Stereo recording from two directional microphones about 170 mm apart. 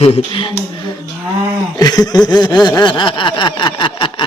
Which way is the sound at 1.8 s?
20° left (ahead or behind).